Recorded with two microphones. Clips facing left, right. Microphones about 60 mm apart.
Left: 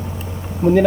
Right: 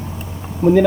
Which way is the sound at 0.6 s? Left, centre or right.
Left.